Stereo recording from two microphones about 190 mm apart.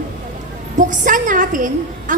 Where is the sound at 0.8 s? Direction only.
45° right (ahead or behind).